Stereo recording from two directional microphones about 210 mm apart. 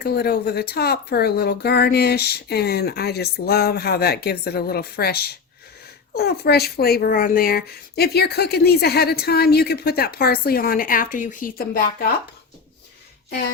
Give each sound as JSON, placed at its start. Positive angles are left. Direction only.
{"t": 0.0, "sound": "speech", "side_deg": 50}